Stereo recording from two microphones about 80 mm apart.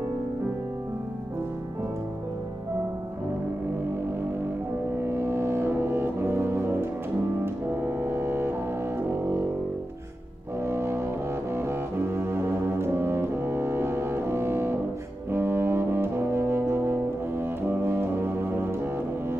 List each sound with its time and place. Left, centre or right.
5.1 s music: right
10.6 s music: right
11.5 s brass instrument: right